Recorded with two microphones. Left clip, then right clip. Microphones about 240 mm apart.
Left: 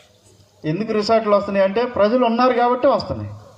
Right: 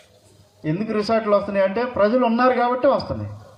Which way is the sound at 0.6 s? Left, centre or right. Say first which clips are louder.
Left 3 dB; left.